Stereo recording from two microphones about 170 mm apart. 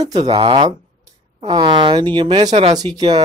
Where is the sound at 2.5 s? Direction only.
40° right (ahead or behind).